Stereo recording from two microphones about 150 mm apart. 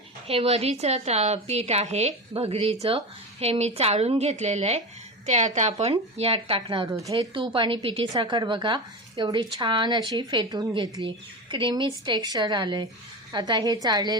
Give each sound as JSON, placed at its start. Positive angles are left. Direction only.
{"t": 0.3, "sound": "a woman's voice", "side_deg": -40}